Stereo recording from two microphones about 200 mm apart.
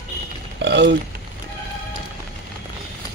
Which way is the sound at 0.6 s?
60° right (ahead or behind).